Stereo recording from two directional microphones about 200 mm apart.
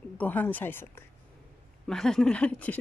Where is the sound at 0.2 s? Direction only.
10° left (ahead or behind).